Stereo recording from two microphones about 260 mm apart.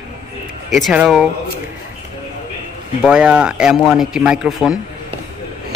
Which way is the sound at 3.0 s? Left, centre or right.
Centre.